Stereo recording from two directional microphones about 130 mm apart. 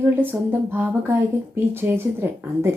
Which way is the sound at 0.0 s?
15° right (ahead or behind).